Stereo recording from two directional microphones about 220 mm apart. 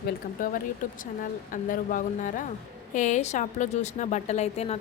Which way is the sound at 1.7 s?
35° left (ahead or behind).